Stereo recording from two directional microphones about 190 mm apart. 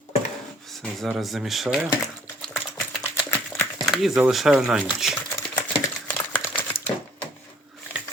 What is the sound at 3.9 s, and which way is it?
Speech, centre (ahead or behind).